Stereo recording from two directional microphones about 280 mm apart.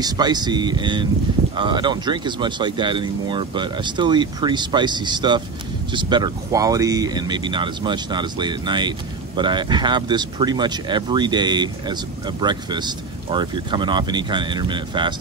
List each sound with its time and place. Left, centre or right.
0.0 s speech: centre